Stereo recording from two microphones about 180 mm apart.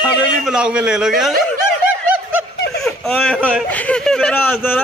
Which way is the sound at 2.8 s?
5° left (ahead or behind).